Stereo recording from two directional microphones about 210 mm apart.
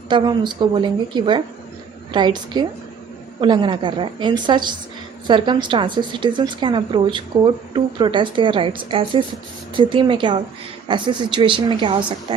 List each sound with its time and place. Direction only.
0.1 s a woman's voice: 20° right (ahead or behind)